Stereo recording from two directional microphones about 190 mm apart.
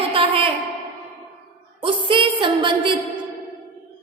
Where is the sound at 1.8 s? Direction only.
25° right (ahead or behind).